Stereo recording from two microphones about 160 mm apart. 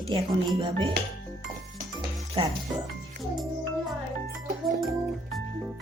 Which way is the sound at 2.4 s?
35° right (ahead or behind).